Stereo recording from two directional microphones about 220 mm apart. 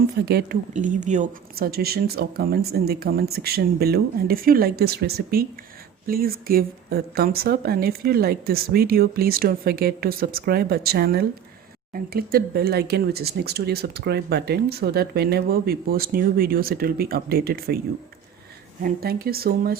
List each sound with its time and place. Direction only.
0.3 s speech: 45° right (ahead or behind)
0.7 s speech: 35° right (ahead or behind)
18.8 s speech: 40° right (ahead or behind)